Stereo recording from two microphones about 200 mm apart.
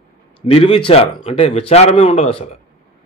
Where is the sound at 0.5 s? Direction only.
30° left (ahead or behind).